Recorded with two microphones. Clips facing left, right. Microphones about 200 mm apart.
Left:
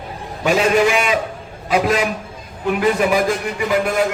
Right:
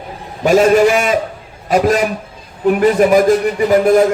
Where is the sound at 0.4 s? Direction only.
45° right (ahead or behind).